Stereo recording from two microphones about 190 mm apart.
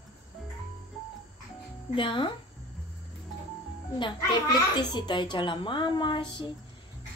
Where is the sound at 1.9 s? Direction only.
25° left (ahead or behind).